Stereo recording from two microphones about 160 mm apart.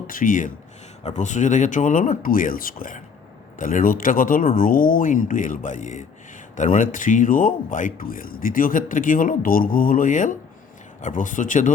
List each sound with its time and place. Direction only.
0.1 s a man's voice: 55° left (ahead or behind)